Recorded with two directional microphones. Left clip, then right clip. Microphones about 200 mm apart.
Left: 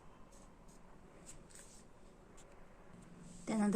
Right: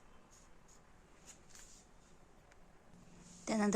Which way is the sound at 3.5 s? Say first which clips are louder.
Right 2 dB; 35° right (ahead or behind).